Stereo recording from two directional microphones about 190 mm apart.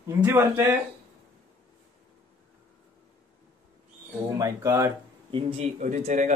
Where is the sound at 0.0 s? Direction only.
15° right (ahead or behind).